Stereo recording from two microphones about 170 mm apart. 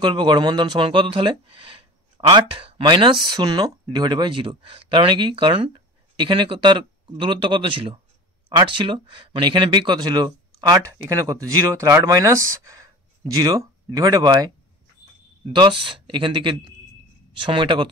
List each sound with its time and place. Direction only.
0.0 s speech: 25° right (ahead or behind)
15.5 s speech: 30° right (ahead or behind)